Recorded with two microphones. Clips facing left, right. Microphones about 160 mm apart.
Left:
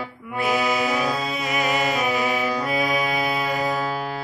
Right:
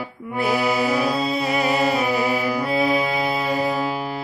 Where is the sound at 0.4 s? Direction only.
35° right (ahead or behind).